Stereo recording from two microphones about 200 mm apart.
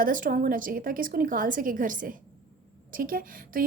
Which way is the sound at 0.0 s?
45° right (ahead or behind).